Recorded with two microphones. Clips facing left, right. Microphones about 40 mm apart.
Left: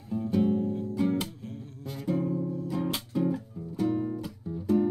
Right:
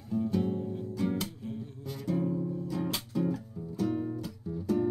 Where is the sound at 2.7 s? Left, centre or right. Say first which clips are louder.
Left 4 dB; centre.